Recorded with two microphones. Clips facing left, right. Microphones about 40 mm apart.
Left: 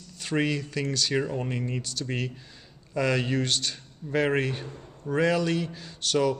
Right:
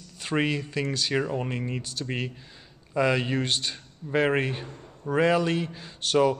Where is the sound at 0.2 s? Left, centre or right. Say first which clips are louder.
Right 1 dB; centre.